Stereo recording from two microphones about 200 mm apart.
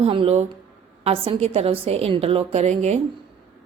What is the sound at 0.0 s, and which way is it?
A woman's voice, 30° right (ahead or behind).